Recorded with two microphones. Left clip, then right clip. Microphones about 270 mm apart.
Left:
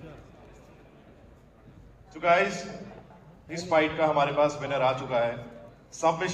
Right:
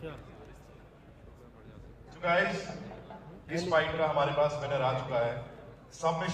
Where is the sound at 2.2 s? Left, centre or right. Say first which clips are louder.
Left 5 dB; left.